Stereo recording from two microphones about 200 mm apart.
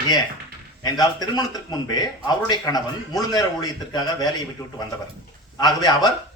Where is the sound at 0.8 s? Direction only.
20° left (ahead or behind).